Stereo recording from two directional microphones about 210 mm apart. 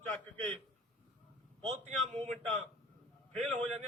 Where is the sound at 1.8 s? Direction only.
30° right (ahead or behind).